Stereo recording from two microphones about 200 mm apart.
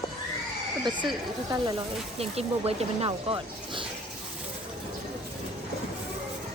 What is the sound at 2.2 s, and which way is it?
Speech, 30° right (ahead or behind).